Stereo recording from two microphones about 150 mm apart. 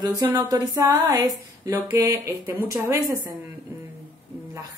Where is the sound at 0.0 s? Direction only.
20° right (ahead or behind).